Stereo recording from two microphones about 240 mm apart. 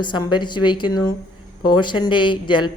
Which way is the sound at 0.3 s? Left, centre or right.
Centre.